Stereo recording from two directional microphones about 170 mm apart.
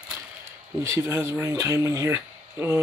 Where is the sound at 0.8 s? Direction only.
15° right (ahead or behind).